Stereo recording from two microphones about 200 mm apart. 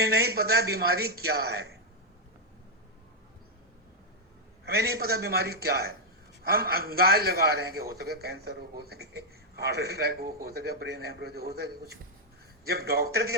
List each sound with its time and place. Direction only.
0.0 s a man's voice: 50° right (ahead or behind)
4.6 s a man's voice: 50° right (ahead or behind)